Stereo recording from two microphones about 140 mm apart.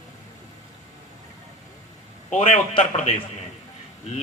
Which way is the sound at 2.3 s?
45° left (ahead or behind).